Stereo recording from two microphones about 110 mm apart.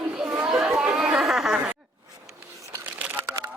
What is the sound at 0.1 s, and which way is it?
Chatter, 10° right (ahead or behind).